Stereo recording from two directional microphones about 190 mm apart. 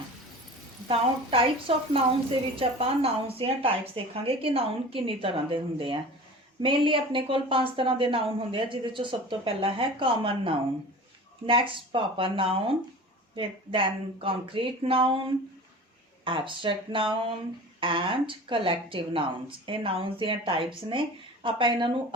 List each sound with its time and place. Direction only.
0.9 s speech: 30° right (ahead or behind)
16.2 s speech: 25° right (ahead or behind)